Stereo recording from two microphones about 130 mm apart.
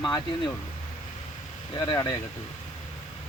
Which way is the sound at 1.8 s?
25° left (ahead or behind).